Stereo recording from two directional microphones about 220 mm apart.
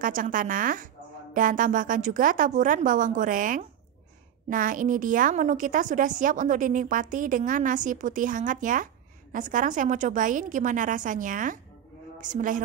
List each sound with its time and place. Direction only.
0.0 s a woman's voice: 35° right (ahead or behind)